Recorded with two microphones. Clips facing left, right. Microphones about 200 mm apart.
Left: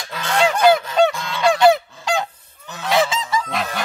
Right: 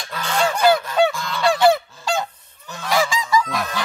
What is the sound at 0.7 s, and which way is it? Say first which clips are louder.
Goose: left 2 dB; 20° left (ahead or behind).